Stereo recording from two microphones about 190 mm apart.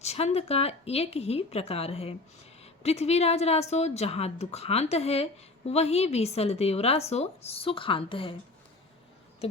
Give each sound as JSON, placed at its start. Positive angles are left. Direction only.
{"t": 0.0, "sound": "a woman's voice", "side_deg": 35}
{"t": 9.4, "sound": "a woman's voice", "side_deg": 30}